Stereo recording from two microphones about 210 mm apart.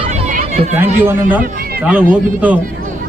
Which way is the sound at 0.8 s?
10° right (ahead or behind).